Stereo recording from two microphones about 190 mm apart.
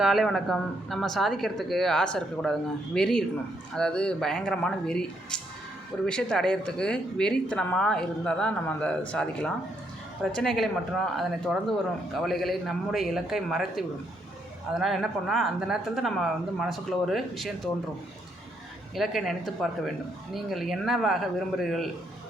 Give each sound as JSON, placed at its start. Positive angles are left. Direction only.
{"t": 0.0, "sound": "speech", "side_deg": 0}
{"t": 18.9, "sound": "speech", "side_deg": 0}